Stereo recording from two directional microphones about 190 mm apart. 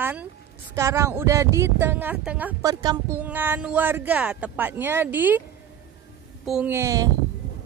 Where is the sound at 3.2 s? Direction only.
10° right (ahead or behind).